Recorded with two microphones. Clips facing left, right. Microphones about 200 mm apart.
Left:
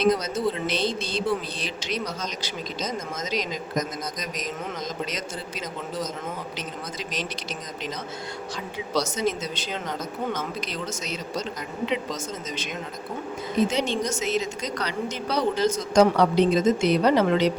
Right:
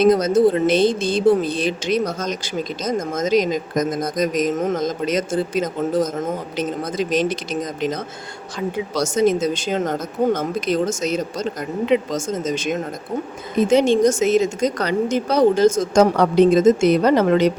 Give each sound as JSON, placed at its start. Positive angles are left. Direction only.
{"t": 0.0, "sound": "speech", "side_deg": -50}
{"t": 9.0, "sound": "speech", "side_deg": -50}